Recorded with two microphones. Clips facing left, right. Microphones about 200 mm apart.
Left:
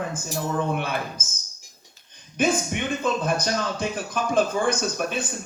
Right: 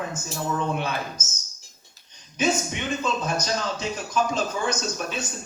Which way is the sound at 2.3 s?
55° left (ahead or behind).